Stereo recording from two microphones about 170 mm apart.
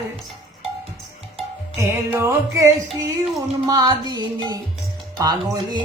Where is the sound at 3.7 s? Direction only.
25° right (ahead or behind).